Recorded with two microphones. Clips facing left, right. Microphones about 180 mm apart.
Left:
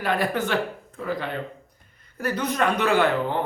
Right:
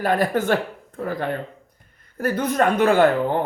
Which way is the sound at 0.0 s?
45° right (ahead or behind).